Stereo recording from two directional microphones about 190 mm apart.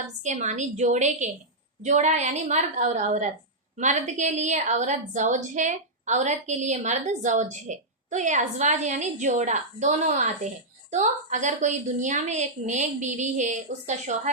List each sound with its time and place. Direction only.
0.2 s a woman's voice: 40° right (ahead or behind)